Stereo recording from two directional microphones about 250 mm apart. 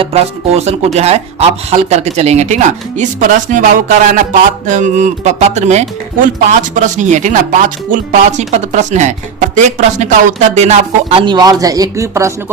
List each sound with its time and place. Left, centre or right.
0.0 s speech: right